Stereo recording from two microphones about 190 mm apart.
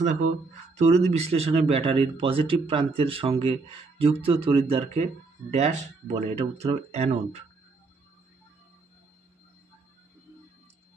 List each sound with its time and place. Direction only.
0.7 s speech: 35° right (ahead or behind)